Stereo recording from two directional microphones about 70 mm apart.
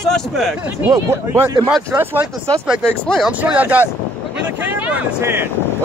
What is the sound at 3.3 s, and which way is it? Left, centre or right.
Speech, right.